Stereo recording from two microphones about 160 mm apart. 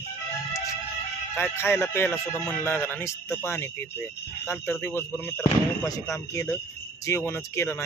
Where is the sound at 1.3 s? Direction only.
15° left (ahead or behind).